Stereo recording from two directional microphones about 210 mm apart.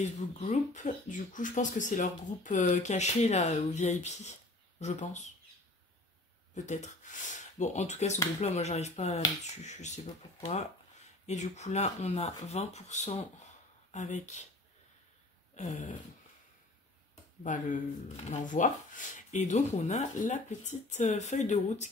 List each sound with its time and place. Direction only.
0.0 s speech: 35° left (ahead or behind)
6.5 s speech: 35° left (ahead or behind)
15.5 s speech: 35° left (ahead or behind)
17.4 s speech: 35° left (ahead or behind)